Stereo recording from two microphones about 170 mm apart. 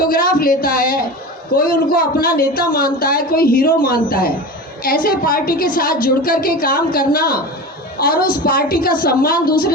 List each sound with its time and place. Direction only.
0.0 s a woman's voice: 55° left (ahead or behind)